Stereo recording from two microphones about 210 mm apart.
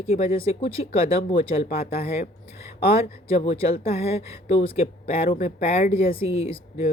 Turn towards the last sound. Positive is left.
turn(degrees=30)  # may be behind; listen again after turning